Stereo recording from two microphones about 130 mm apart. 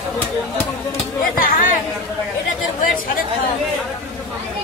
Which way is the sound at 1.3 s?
90° left.